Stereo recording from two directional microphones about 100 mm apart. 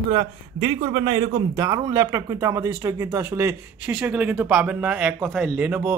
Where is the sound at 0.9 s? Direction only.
50° right (ahead or behind); by 3.6 s 25° right (ahead or behind).